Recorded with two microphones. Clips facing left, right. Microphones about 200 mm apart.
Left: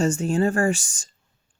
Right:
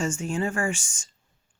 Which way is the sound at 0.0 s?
40° left (ahead or behind).